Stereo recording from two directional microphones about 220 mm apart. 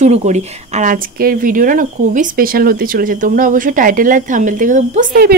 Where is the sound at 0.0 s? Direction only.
30° right (ahead or behind).